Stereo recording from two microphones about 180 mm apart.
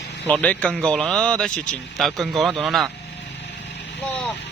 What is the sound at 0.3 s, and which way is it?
Speech, 10° left (ahead or behind).